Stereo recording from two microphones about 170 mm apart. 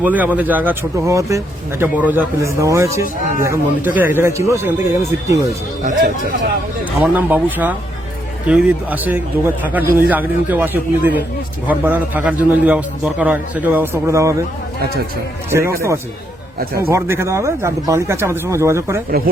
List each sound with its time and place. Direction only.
0.0 s a man's voice: 10° right (ahead or behind)
7.0 s a man's voice: 10° right (ahead or behind)
15.4 s a man's voice: 15° right (ahead or behind)